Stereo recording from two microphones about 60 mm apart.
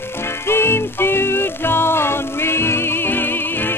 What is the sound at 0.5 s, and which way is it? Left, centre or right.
Music, left.